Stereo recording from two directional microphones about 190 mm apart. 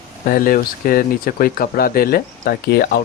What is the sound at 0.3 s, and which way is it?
Speech, 50° left (ahead or behind).